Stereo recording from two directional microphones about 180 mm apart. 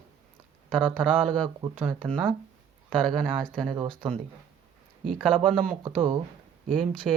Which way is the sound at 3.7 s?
25° right (ahead or behind).